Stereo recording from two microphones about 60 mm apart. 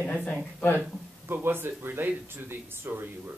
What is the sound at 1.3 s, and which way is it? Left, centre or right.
Speech, right.